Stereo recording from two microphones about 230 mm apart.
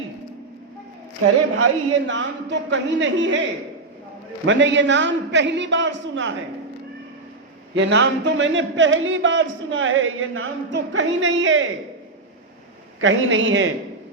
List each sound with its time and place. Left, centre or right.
1.5 s a man's voice: right
4.4 s a man's voice: right
7.8 s speech: right
13.0 s a man's voice: right